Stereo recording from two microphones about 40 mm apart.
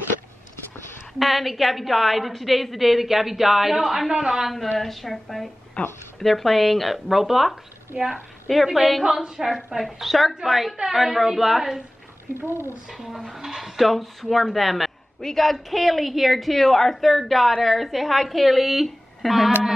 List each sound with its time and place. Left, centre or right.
1.2 s a woman's voice: centre
4.7 s a woman's voice: centre
5.8 s speech: left
6.1 s a woman's voice: centre
12.4 s speech: left
12.8 s a woman's voice: centre